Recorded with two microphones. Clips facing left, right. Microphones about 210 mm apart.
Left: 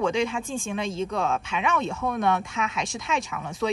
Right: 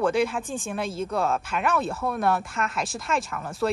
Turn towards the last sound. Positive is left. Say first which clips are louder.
# right 1 dB
turn(degrees=0)  # may be behind; listen again after turning